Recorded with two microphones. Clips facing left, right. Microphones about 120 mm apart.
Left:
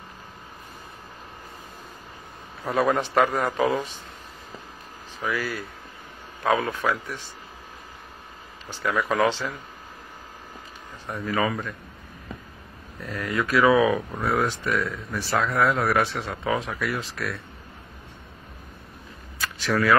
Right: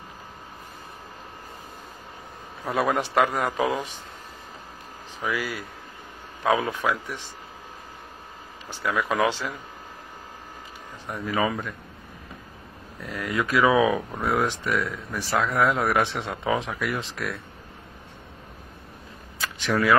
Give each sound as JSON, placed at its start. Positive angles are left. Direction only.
{"t": 2.6, "sound": "speech", "side_deg": -10}
{"t": 5.2, "sound": "speech", "side_deg": -15}
{"t": 8.6, "sound": "speech", "side_deg": -10}
{"t": 11.1, "sound": "speech", "side_deg": -10}
{"t": 13.0, "sound": "speech", "side_deg": -10}
{"t": 19.4, "sound": "a sound", "side_deg": -15}